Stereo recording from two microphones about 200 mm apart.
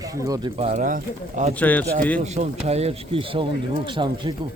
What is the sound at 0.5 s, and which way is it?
Speech, 35° right (ahead or behind).